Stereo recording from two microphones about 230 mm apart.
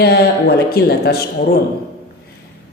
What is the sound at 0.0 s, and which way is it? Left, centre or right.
A man's voice, left.